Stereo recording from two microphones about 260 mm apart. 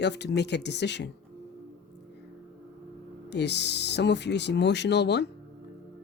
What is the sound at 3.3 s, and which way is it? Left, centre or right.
Speech, left.